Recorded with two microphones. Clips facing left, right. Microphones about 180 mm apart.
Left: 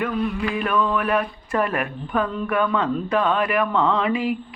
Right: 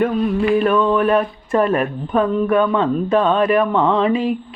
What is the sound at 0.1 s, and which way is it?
Speech, 35° right (ahead or behind).